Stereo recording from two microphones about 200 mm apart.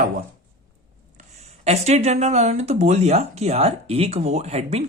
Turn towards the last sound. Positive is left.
turn(degrees=-30)  # may be behind; listen again after turning